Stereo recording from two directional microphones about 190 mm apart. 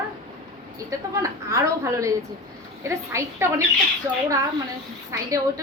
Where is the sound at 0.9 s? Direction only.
15° right (ahead or behind).